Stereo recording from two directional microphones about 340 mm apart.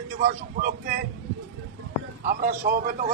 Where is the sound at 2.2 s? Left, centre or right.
Right.